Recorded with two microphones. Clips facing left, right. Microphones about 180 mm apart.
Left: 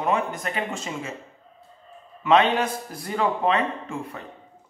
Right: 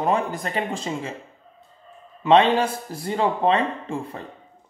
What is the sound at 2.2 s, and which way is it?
A man's voice, 30° right (ahead or behind).